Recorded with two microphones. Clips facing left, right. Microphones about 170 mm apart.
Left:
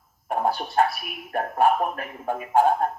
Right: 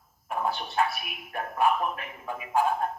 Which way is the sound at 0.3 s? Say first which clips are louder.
Left 5 dB; 45° left (ahead or behind).